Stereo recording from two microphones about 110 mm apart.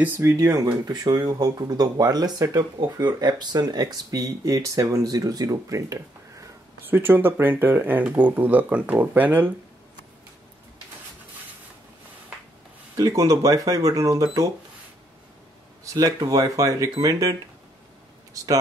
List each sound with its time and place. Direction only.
0.2 s speech: 30° right (ahead or behind)
12.9 s speech: 30° right (ahead or behind)
15.9 s speech: 35° right (ahead or behind)